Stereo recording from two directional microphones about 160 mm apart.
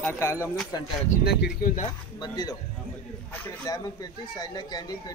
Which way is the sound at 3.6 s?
25° left (ahead or behind).